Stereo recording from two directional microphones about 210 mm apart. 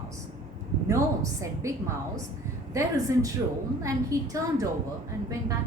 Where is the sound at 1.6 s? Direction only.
15° right (ahead or behind).